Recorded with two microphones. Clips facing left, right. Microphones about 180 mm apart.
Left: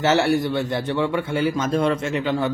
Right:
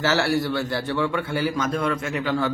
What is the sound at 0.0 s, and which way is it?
Mantra, 20° left (ahead or behind).